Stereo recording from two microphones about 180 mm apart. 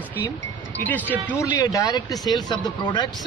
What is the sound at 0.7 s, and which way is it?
Speech, 10° left (ahead or behind).